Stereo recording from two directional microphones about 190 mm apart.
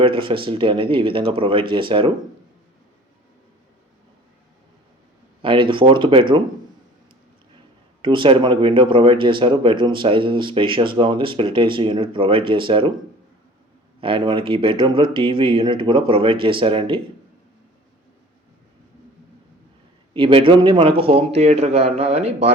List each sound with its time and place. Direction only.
0.2 s speech: 25° right (ahead or behind)
5.4 s speech: 25° right (ahead or behind)
8.0 s speech: 25° right (ahead or behind)
14.0 s speech: 25° right (ahead or behind)
20.1 s a man's voice: 25° right (ahead or behind)